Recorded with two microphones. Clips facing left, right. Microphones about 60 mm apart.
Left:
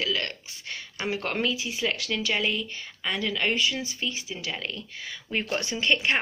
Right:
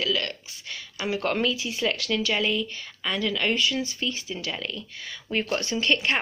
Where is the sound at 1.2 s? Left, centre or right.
Centre.